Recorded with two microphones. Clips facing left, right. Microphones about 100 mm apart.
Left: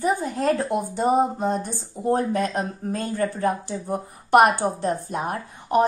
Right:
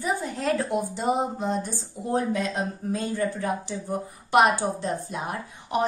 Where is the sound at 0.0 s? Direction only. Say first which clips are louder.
Left 5 dB; 45° left (ahead or behind).